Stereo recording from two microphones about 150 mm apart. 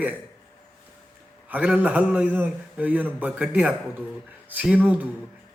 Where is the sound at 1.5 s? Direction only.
10° right (ahead or behind).